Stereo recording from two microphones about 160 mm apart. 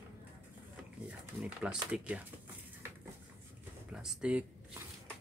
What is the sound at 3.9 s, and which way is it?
Speech, 5° right (ahead or behind).